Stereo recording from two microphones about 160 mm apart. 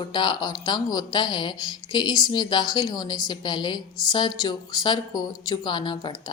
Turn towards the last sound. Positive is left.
turn(degrees=30)  # may be behind; listen again after turning